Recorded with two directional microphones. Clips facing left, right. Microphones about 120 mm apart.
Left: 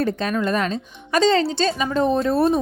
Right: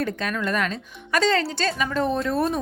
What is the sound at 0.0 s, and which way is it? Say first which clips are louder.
Speech: left 5 dB; 30° left (ahead or behind).